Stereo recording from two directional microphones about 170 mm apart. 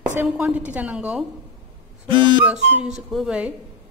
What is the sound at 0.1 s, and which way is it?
A woman's voice, 10° right (ahead or behind).